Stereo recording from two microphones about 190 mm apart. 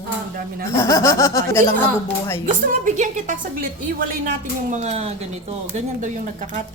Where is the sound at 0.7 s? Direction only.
15° left (ahead or behind).